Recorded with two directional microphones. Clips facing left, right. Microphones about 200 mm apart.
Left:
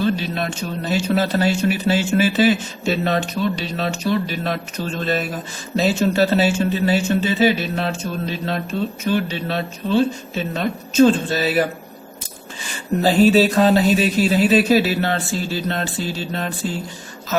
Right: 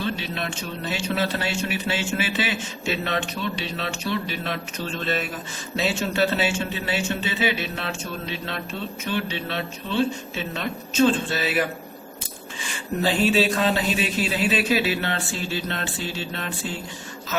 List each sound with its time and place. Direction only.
0.0 s a man's voice: 40° left (ahead or behind)
13.0 s a man's voice: 40° left (ahead or behind)